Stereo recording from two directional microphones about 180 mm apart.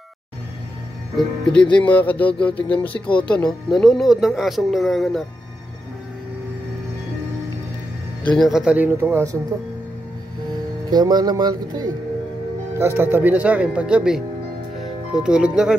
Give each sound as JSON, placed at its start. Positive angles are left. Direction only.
{"t": 1.1, "sound": "speech", "side_deg": 5}
{"t": 8.2, "sound": "speech", "side_deg": 5}
{"t": 10.9, "sound": "speech", "side_deg": -20}
{"t": 14.8, "sound": "music", "side_deg": -5}